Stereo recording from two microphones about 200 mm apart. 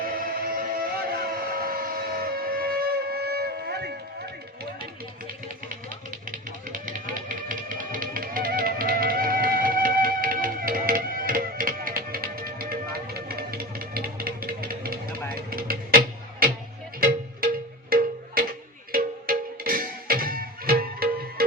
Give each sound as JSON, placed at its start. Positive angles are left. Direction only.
{"t": 0.0, "sound": "music", "side_deg": -45}
{"t": 6.7, "sound": "music", "side_deg": -40}
{"t": 15.3, "sound": "vehicle", "side_deg": -45}
{"t": 17.0, "sound": "music", "side_deg": -50}